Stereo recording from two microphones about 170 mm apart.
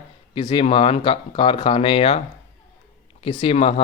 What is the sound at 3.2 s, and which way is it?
Speech, 30° left (ahead or behind).